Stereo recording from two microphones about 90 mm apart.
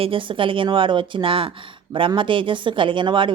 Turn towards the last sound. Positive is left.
turn(degrees=-65)  # may be behind; listen again after turning